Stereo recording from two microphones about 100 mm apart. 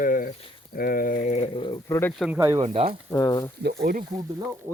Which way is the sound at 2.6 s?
70° right (ahead or behind).